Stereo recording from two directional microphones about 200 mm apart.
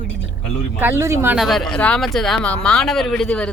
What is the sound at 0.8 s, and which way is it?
Speech, 15° right (ahead or behind).